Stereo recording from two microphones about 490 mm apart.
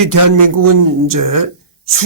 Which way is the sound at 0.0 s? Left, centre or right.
Right.